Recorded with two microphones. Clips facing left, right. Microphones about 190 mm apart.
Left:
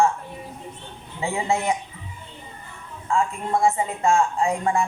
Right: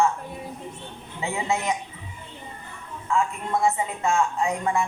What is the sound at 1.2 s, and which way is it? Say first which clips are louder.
Speech: left 3 dB; 30° left (ahead or behind).